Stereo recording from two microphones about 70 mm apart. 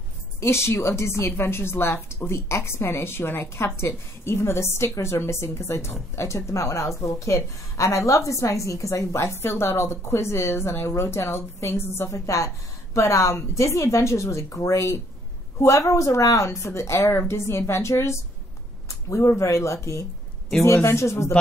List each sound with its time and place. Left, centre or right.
0.4 s a woman's voice: left